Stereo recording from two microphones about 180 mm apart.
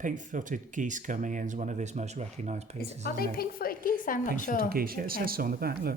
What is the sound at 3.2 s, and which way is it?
A woman's voice, 55° left (ahead or behind).